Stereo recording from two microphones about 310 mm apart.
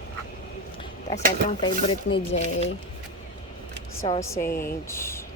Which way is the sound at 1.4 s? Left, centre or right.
Centre.